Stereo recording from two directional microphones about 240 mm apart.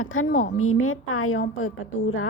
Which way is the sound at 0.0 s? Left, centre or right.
Left.